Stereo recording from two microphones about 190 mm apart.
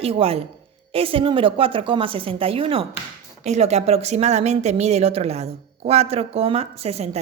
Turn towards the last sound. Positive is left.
turn(degrees=-35)  # may be behind; listen again after turning